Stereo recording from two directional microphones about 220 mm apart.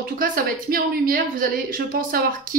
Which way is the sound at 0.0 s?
40° right (ahead or behind).